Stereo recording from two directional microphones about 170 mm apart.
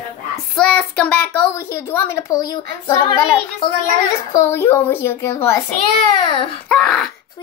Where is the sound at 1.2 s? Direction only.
10° left (ahead or behind).